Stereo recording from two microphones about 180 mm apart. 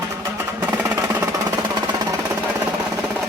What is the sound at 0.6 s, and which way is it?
Music, 15° right (ahead or behind).